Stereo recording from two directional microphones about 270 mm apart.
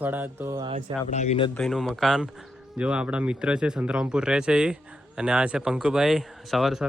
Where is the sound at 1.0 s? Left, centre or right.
Left.